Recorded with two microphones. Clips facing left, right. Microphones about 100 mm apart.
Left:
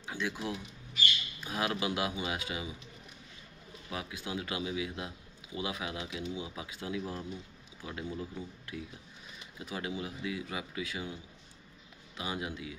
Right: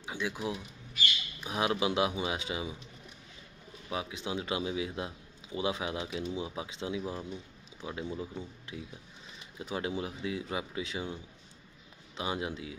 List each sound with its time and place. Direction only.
0.0 s a man's voice: 15° right (ahead or behind)
3.9 s a man's voice: 25° right (ahead or behind)
12.2 s a man's voice: 30° right (ahead or behind)